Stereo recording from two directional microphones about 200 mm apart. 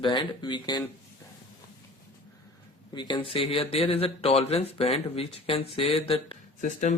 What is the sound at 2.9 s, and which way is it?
Speech, 25° left (ahead or behind).